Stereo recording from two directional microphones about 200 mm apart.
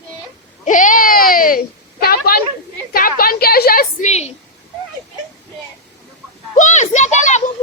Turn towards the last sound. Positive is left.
turn(degrees=35)  # may be behind; listen again after turning